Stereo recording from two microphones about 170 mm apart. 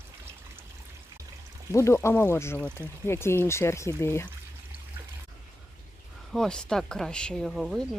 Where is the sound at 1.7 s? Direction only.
15° left (ahead or behind).